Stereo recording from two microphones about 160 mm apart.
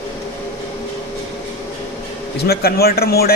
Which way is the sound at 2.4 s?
75° left (ahead or behind).